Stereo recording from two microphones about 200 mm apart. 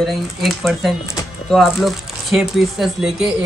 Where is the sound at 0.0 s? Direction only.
Centre (ahead or behind).